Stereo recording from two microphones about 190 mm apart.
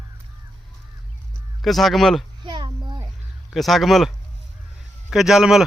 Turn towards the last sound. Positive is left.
turn(degrees=0)  # may be behind; listen again after turning